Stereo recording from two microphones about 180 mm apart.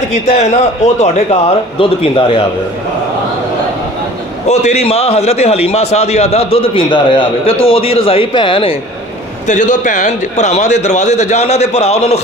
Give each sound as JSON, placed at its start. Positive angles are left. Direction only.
{"t": 0.1, "sound": "a man's voice", "side_deg": 40}
{"t": 4.5, "sound": "a man's voice", "side_deg": 35}
{"t": 9.5, "sound": "a man's voice", "side_deg": 45}